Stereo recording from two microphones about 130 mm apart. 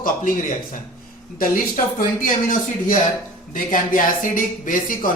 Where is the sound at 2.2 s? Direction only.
80° left.